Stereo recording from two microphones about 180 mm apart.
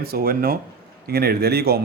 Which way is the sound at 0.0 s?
55° right (ahead or behind).